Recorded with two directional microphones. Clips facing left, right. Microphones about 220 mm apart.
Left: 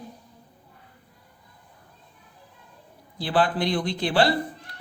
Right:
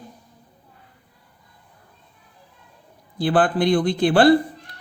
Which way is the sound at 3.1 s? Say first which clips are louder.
Right 5 dB; 50° right (ahead or behind).